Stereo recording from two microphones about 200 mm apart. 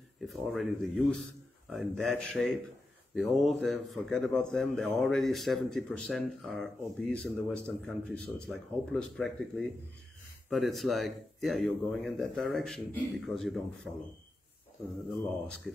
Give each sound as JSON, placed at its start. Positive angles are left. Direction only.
{"t": 0.2, "sound": "a man's voice", "side_deg": 0}